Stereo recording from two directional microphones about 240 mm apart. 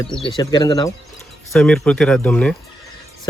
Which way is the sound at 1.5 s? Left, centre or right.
Centre.